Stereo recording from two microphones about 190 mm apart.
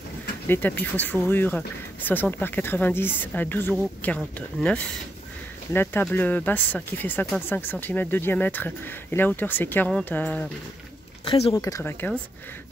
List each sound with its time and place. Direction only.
0.5 s speech: 10° left (ahead or behind)
11.2 s speech: 30° left (ahead or behind)
11.5 s speech: 15° left (ahead or behind)